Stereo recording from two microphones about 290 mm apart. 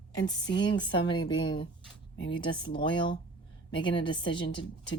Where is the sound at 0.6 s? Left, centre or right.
Centre.